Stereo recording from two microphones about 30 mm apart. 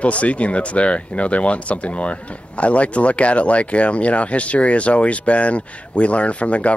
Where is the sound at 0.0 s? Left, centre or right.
Left.